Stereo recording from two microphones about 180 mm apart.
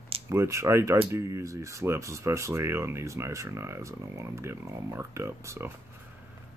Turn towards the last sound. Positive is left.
turn(degrees=-15)  # may be behind; listen again after turning